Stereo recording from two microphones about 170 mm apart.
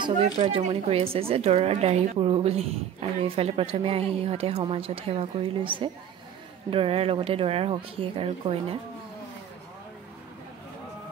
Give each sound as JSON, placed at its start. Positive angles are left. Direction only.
{"t": 0.0, "sound": "a woman's voice", "side_deg": -35}